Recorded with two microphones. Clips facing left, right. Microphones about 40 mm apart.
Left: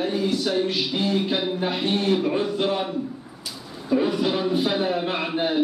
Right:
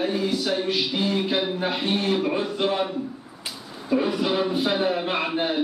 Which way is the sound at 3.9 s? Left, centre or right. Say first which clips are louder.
Left 1 dB; centre.